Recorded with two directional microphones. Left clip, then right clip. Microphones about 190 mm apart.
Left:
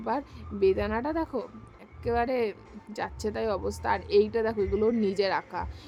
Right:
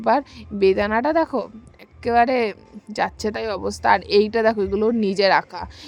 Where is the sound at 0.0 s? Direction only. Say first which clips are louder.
Right 12 dB; 40° right (ahead or behind).